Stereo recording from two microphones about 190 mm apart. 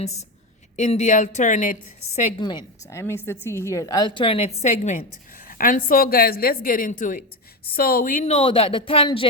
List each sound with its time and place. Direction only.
0.0 s a woman's voice: 35° left (ahead or behind)
2.4 s a woman's voice: 20° left (ahead or behind)